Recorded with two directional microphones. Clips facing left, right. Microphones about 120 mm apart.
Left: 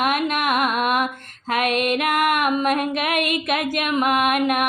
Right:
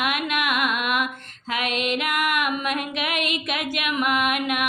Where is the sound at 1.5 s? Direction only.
50° left (ahead or behind).